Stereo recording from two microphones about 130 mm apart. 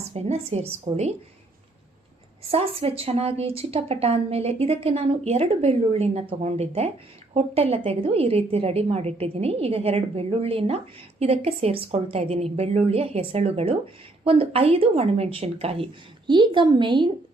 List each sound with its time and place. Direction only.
0.1 s a woman's voice: 55° right (ahead or behind)
2.5 s a woman's voice: 50° right (ahead or behind)
16.2 s a woman's voice: 35° right (ahead or behind)